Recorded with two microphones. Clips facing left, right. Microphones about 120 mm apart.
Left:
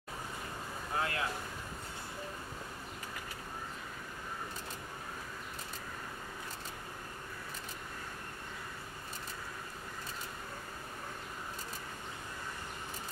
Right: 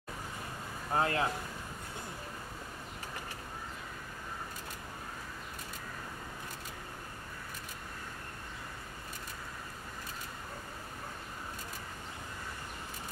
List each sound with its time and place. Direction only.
0.9 s speech: 35° right (ahead or behind)